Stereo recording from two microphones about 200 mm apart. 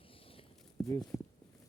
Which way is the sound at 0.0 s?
25° left (ahead or behind).